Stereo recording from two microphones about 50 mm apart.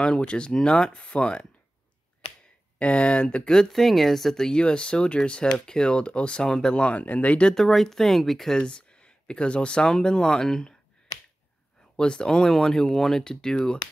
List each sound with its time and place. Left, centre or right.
0.0 s speech: centre
2.8 s speech: left; by 4.5 s centre
4.5 s speech: centre
7.5 s speech: centre
8.5 s speech: centre
12.0 s speech: centre